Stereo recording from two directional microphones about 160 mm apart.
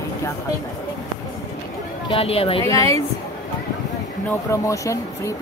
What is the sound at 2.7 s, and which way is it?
Speech, 20° left (ahead or behind).